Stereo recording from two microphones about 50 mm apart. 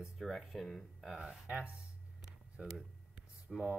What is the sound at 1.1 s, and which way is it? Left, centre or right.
Speech, centre.